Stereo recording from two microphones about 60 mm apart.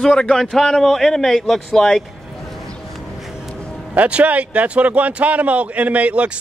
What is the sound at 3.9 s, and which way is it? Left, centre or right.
Speech, right.